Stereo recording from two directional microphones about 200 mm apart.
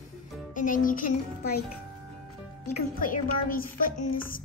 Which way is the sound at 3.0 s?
45° left (ahead or behind).